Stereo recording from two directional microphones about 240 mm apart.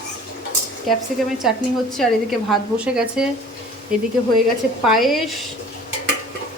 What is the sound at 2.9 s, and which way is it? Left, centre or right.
Speech, centre.